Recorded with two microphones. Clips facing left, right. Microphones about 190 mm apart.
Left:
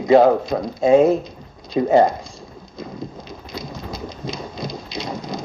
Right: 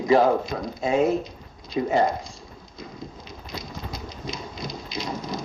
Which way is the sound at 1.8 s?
35° left (ahead or behind).